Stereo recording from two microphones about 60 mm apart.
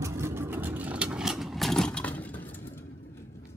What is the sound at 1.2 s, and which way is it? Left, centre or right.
Vehicle, centre.